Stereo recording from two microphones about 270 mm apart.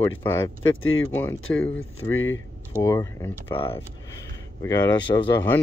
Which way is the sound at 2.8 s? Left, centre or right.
Centre.